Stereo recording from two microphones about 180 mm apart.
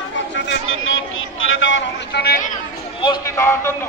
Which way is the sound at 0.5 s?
90° left.